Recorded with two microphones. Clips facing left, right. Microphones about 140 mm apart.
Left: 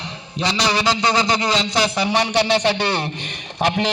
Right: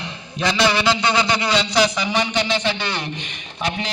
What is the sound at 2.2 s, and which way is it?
A man's voice, 65° left (ahead or behind).